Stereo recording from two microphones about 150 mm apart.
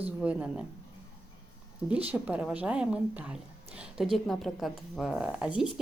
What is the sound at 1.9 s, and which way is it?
Speech, 10° right (ahead or behind).